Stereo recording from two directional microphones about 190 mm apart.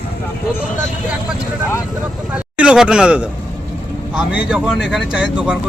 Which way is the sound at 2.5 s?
5° right (ahead or behind).